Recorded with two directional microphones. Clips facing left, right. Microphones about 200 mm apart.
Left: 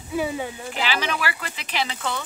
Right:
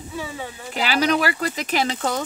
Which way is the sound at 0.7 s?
40° right (ahead or behind).